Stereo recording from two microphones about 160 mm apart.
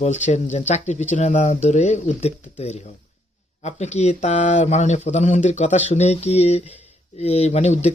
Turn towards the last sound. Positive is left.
turn(degrees=45)  # may be behind; listen again after turning